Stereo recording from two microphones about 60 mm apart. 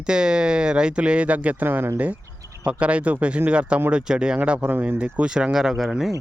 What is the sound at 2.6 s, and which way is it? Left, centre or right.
Speech, right.